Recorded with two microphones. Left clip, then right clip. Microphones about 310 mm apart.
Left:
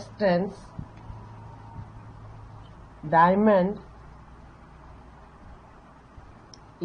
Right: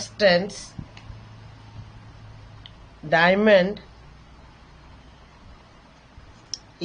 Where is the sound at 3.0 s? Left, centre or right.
Right.